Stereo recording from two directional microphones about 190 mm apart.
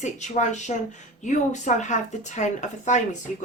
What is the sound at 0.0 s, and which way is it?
Speech, 40° left (ahead or behind).